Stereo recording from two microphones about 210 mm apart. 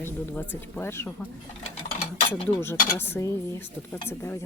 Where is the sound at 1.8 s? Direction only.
35° left (ahead or behind).